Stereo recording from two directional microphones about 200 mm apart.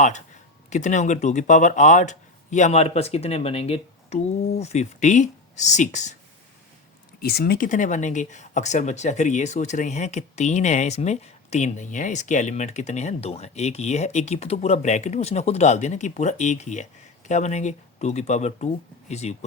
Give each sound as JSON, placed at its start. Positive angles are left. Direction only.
{"t": 0.7, "sound": "speech", "side_deg": 35}
{"t": 7.2, "sound": "speech", "side_deg": 50}